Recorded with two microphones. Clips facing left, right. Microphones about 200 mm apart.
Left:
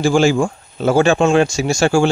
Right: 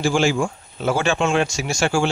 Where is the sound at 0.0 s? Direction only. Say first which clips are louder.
Left 5 dB; 40° left (ahead or behind).